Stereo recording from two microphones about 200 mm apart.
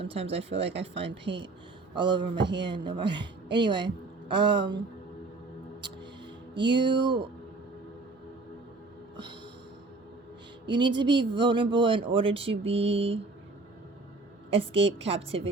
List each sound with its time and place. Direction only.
0.0 s speech: 30° right (ahead or behind)
2.4 s speech: 60° right (ahead or behind)
2.6 s a woman's voice: 25° right (ahead or behind)
6.5 s speech: 25° right (ahead or behind)
10.8 s speech: 25° right (ahead or behind)
14.5 s speech: 25° right (ahead or behind)